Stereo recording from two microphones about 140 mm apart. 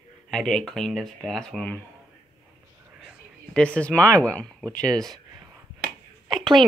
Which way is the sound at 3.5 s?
10° left (ahead or behind).